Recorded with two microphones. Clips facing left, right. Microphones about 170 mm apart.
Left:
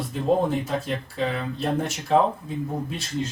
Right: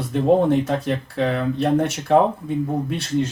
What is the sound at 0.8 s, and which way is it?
Speech, 65° right (ahead or behind).